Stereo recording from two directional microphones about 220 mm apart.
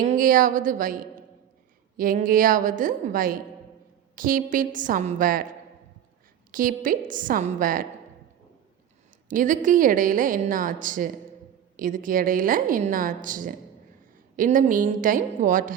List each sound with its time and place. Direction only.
0.0 s a woman's voice: 35° right (ahead or behind)
2.0 s a woman's voice: 40° right (ahead or behind)
6.5 s a woman's voice: 40° right (ahead or behind)
9.3 s a woman's voice: 35° right (ahead or behind)